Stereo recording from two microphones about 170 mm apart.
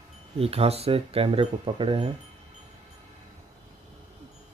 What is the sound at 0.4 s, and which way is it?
Speech, 35° right (ahead or behind).